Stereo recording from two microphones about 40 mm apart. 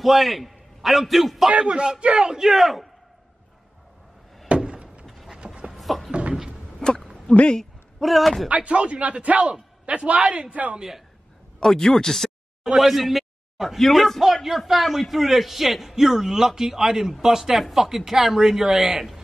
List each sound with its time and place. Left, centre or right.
0.0 s a man's voice: centre
1.5 s speech: right
2.5 s speech: centre
4.6 s a sound: centre
5.0 s a sound: centre
6.8 s a sound: centre
7.3 s speech: left
8.0 s a man's voice: centre
8.5 s a man's voice: right
10.8 s speech: centre
11.6 s speech: centre
12.7 s speech: centre